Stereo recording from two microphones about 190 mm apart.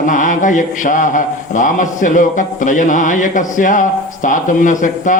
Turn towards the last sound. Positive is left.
turn(degrees=40)  # may be behind; listen again after turning